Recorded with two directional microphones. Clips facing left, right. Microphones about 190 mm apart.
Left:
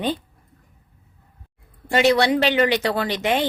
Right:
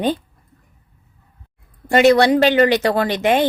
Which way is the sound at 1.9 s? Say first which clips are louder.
Right 5 dB; 50° right (ahead or behind).